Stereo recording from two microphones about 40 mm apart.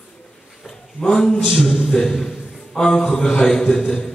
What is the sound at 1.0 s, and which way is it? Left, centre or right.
A man's voice, centre.